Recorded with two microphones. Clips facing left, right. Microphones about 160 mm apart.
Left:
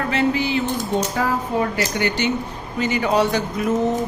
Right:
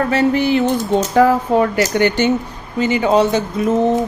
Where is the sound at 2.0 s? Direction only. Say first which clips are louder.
Right 7 dB; 55° right (ahead or behind).